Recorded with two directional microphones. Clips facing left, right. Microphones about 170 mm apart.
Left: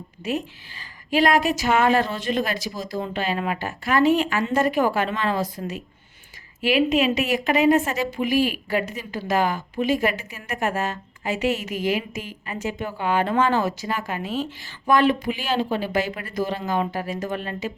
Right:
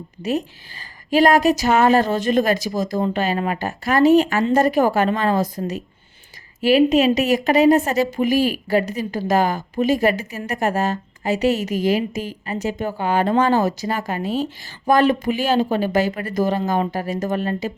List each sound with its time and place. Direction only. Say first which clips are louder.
0.2 s a woman's voice: right 4 dB; 40° right (ahead or behind)